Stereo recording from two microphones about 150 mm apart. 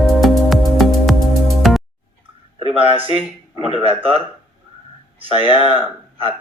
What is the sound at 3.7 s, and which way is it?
Speech, 40° right (ahead or behind).